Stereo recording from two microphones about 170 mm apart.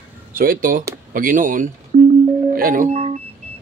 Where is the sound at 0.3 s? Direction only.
55° right (ahead or behind).